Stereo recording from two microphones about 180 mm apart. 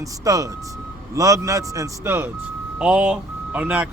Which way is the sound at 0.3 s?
20° right (ahead or behind).